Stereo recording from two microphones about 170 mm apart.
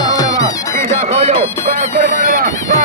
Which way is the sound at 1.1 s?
35° right (ahead or behind).